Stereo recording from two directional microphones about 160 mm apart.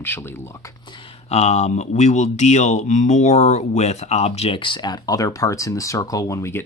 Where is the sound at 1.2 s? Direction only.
45° left (ahead or behind).